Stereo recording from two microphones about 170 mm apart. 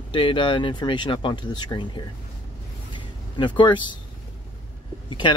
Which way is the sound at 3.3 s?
30° left (ahead or behind).